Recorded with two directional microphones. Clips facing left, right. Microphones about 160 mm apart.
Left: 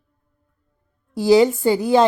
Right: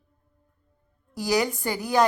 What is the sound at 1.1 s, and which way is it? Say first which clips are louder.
Speech: left 11 dB; 25° left (ahead or behind).